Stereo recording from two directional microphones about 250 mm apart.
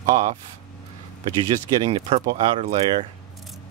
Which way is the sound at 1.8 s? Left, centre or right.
Right.